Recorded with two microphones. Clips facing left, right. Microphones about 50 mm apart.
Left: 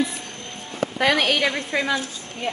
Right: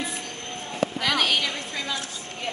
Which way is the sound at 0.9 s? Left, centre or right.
Left.